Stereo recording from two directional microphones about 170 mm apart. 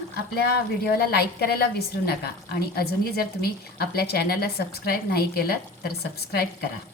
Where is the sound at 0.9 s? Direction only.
65° left (ahead or behind).